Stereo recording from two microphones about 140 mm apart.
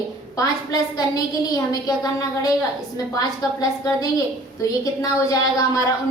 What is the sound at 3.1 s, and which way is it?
A woman's voice, 25° left (ahead or behind).